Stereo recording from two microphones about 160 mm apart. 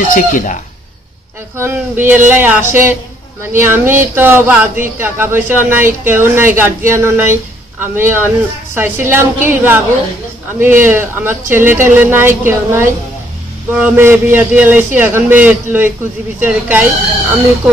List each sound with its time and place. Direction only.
0.1 s speech: 55° left (ahead or behind)
1.6 s speech: 15° right (ahead or behind)